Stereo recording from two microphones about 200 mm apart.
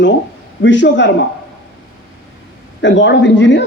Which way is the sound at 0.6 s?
65° left (ahead or behind).